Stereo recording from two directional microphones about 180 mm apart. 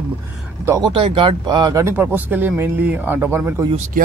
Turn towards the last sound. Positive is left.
turn(degrees=-50)  # may be behind; listen again after turning